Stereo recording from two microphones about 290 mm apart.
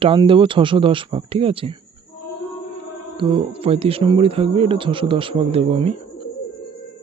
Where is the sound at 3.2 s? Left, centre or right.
Centre.